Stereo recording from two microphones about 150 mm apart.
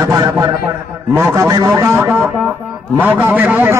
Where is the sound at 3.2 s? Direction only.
10° right (ahead or behind).